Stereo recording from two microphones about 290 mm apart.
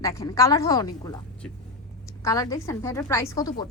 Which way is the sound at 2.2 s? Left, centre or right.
Centre.